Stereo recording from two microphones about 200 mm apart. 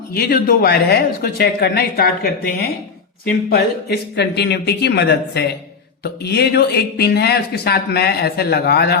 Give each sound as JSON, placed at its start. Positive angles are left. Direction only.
{"t": 0.1, "sound": "speech", "side_deg": 50}